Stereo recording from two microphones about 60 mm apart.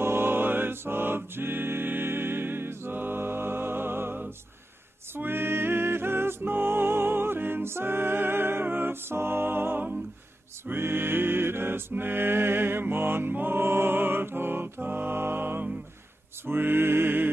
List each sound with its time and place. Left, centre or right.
0.0 s music: right